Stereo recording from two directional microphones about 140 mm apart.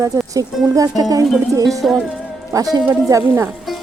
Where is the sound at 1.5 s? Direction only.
25° right (ahead or behind).